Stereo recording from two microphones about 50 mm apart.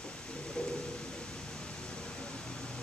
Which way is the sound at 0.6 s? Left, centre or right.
Centre.